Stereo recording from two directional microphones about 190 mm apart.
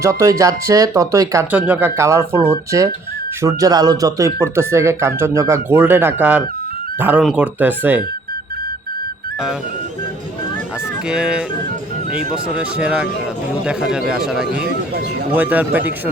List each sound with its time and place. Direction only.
0.0 s speech: 15° right (ahead or behind)
11.1 s speech: 5° right (ahead or behind)